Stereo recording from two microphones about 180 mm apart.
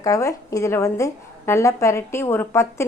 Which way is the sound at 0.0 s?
20° left (ahead or behind).